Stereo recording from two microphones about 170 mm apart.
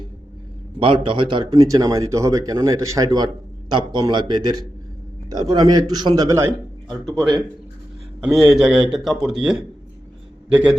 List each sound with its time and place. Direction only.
0.8 s speech: 30° right (ahead or behind)
8.4 s a man's voice: 5° right (ahead or behind)